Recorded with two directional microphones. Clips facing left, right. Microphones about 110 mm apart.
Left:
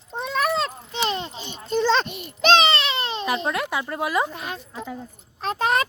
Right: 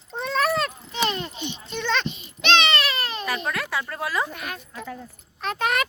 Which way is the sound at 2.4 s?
35° left (ahead or behind).